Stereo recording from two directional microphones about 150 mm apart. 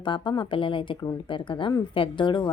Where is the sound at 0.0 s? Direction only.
35° left (ahead or behind).